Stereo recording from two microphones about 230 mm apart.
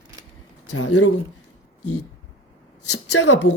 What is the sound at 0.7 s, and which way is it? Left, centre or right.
Speech, left.